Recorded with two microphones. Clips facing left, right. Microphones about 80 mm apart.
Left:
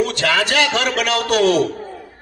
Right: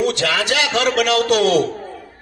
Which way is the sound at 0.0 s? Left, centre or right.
Left.